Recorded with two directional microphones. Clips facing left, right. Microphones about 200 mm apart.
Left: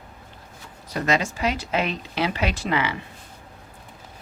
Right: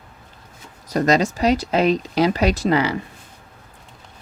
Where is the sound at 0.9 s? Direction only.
40° right (ahead or behind).